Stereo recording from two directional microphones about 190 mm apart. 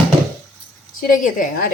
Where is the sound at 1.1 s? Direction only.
45° left (ahead or behind).